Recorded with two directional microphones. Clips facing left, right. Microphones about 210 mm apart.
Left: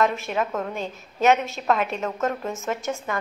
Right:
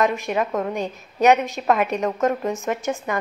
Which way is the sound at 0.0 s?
15° right (ahead or behind).